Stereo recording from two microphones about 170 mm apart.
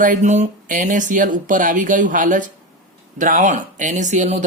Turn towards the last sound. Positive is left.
turn(degrees=-45)  # may be behind; listen again after turning